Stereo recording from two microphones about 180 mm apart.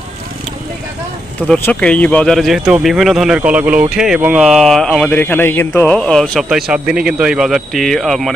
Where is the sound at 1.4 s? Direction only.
5° left (ahead or behind).